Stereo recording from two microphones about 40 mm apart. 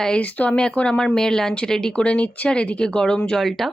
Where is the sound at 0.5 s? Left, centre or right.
Left.